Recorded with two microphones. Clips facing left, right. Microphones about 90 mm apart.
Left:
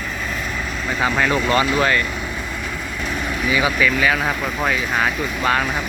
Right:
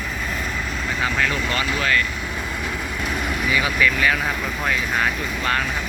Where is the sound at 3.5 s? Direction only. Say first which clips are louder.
Left 3 dB; 10° left (ahead or behind).